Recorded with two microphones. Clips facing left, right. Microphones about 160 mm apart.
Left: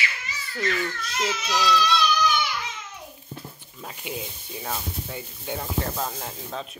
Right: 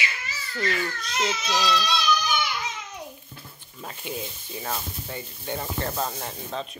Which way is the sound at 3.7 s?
5° left (ahead or behind).